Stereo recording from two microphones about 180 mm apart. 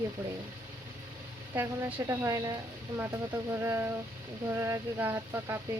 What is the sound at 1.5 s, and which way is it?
Speech, 15° right (ahead or behind).